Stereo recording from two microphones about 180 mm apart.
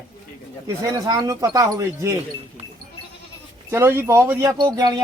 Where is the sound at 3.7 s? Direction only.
15° right (ahead or behind).